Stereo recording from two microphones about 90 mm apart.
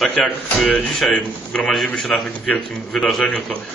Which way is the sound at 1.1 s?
5° left (ahead or behind).